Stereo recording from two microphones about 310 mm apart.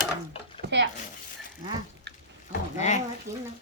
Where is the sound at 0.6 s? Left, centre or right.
Right.